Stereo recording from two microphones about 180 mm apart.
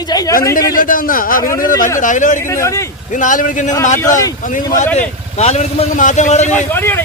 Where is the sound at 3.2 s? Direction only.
45° left (ahead or behind).